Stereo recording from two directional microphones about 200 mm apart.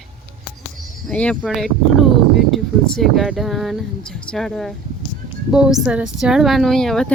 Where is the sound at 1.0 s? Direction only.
5° left (ahead or behind).